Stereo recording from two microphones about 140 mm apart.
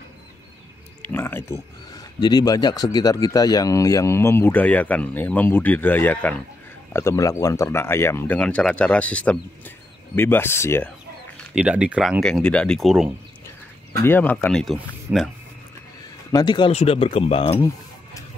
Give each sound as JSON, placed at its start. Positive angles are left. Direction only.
{"t": 1.0, "sound": "speech", "side_deg": 15}
{"t": 2.0, "sound": "speech", "side_deg": 30}
{"t": 11.5, "sound": "speech", "side_deg": -10}
{"t": 14.0, "sound": "speech", "side_deg": 15}
{"t": 15.1, "sound": "speech", "side_deg": -10}
{"t": 16.3, "sound": "speech", "side_deg": 30}
{"t": 16.7, "sound": "speech", "side_deg": 45}